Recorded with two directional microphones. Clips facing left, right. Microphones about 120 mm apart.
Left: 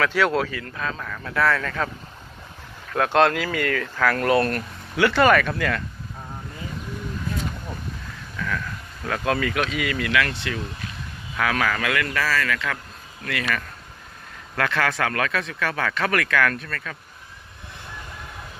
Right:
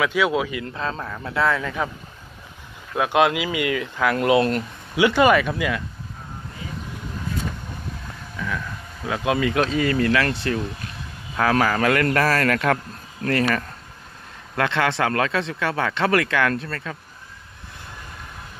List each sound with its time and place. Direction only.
0.0 s speech: 10° right (ahead or behind)
2.9 s speech: 10° right (ahead or behind)
8.4 s speech: 15° right (ahead or behind)
9.6 s speech: 35° right (ahead or behind); by 12.7 s 50° right (ahead or behind)
13.2 s speech: 40° right (ahead or behind)
14.5 s speech: 25° right (ahead or behind)